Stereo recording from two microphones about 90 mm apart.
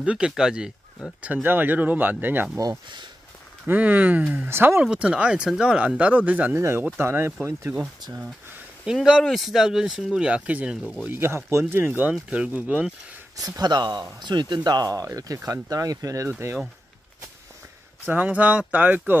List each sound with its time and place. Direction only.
0.0 s speech: 10° right (ahead or behind)
1.2 s speech: 20° right (ahead or behind)
3.6 s speech: 20° right (ahead or behind)
4.8 s speech: 10° right (ahead or behind)
6.5 s speech: 30° right (ahead or behind)
8.8 s speech: 10° right (ahead or behind)
11.1 s speech: 25° right (ahead or behind)
13.6 s speech: 50° right (ahead or behind); by 16.5 s 30° right (ahead or behind)
18.0 s speech: 20° right (ahead or behind)